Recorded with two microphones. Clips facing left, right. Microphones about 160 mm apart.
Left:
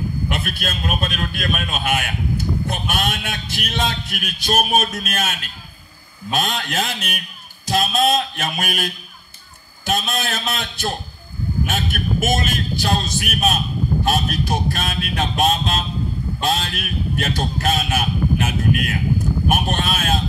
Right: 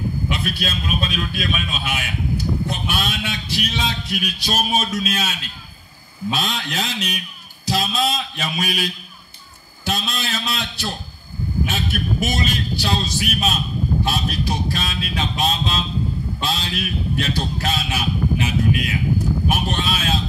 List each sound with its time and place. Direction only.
0.3 s a man's voice: 50° left (ahead or behind)